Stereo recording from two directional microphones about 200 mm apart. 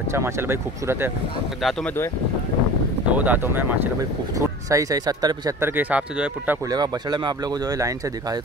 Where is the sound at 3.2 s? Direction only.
10° right (ahead or behind).